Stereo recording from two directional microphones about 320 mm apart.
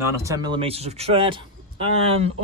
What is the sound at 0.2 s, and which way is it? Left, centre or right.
Speech, centre.